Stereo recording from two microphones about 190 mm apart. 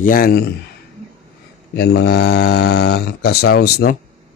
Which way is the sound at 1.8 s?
60° left (ahead or behind).